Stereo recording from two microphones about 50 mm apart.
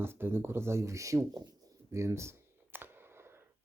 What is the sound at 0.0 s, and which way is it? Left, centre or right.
Speech, right.